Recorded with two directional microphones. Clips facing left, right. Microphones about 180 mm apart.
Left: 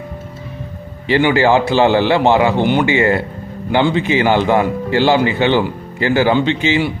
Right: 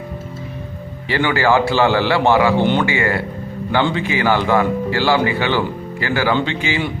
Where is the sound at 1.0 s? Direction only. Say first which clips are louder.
Left 4 dB; 20° left (ahead or behind).